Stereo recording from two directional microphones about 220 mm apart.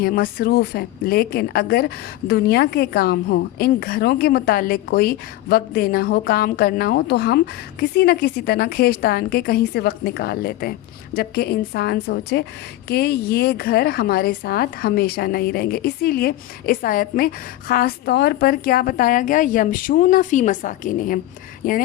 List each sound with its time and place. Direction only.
0.0 s a woman's voice: 40° left (ahead or behind)